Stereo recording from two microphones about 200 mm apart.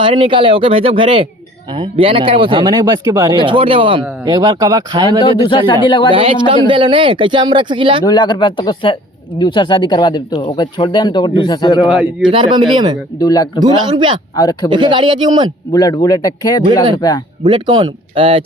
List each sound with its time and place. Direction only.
0.0 s speech: 25° right (ahead or behind)
5.2 s speech: 25° left (ahead or behind)
6.1 s speech: 25° right (ahead or behind)
8.0 s speech: 20° left (ahead or behind)
11.9 s a man's voice: centre (ahead or behind)
12.3 s speech: 25° right (ahead or behind)
13.1 s speech: 20° left (ahead or behind)
13.6 s speech: 20° right (ahead or behind)
14.3 s speech: 20° left (ahead or behind)
14.7 s speech: 25° right (ahead or behind)
15.7 s speech: 20° left (ahead or behind)
17.4 s speech: 25° right (ahead or behind)